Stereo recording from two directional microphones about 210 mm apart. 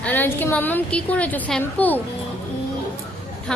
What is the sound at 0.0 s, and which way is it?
A woman's voice, 10° left (ahead or behind).